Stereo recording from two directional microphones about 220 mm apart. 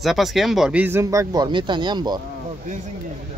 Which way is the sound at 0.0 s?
Centre (ahead or behind).